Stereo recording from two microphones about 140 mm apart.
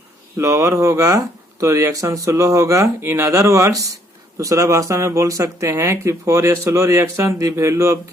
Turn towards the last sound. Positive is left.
turn(degrees=-20)  # may be behind; listen again after turning